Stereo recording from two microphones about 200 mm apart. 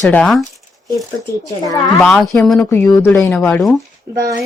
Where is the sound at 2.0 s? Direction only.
Centre (ahead or behind).